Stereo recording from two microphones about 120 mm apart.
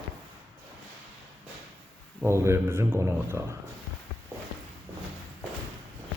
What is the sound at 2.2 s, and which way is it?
A man's voice, 20° right (ahead or behind).